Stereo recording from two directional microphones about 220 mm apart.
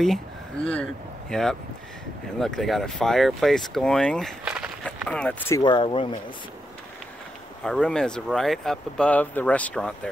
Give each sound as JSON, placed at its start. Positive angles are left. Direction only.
{"t": 1.3, "sound": "speech", "side_deg": 0}
{"t": 5.6, "sound": "speech", "side_deg": 20}
{"t": 7.6, "sound": "speech", "side_deg": 5}